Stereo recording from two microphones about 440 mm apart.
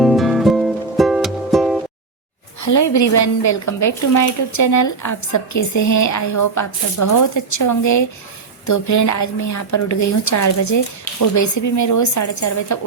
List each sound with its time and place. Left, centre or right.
0.0 s music: centre
2.6 s a woman's voice: left